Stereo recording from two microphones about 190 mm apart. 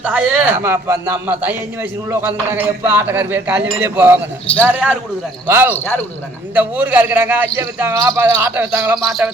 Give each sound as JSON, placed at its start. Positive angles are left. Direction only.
{"t": 0.0, "sound": "a man's voice", "side_deg": -10}
{"t": 5.7, "sound": "speech", "side_deg": 10}
{"t": 6.5, "sound": "a man's voice", "side_deg": -10}